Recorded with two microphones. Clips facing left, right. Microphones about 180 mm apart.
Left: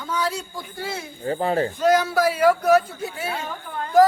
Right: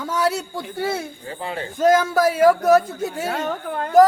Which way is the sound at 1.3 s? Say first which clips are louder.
Left 9 dB; 40° left (ahead or behind).